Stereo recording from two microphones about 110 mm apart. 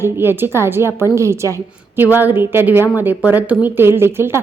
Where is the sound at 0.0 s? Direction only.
20° right (ahead or behind).